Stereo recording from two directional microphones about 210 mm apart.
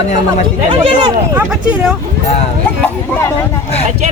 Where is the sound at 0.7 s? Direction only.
25° right (ahead or behind).